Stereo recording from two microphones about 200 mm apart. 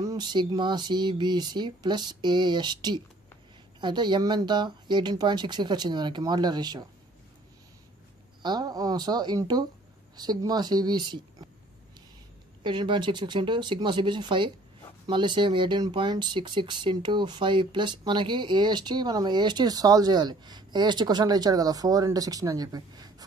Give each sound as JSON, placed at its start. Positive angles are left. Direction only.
{"t": 0.0, "sound": "speech", "side_deg": -20}
{"t": 8.4, "sound": "speech", "side_deg": -20}
{"t": 12.6, "sound": "speech", "side_deg": -25}